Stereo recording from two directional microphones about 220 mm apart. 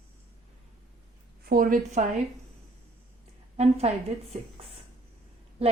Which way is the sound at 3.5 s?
30° right (ahead or behind).